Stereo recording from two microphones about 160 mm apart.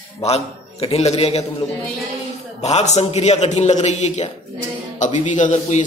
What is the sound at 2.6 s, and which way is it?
A man's voice, 45° left (ahead or behind).